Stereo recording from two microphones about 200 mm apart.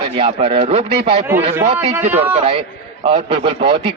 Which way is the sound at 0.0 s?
25° right (ahead or behind).